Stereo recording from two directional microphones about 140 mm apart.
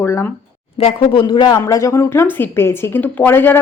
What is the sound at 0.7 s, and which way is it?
Speech, 45° left (ahead or behind).